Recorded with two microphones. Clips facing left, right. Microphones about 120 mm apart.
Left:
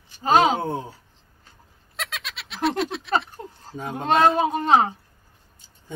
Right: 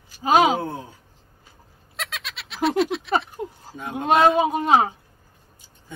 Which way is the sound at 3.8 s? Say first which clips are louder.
Even; 35° left (ahead or behind).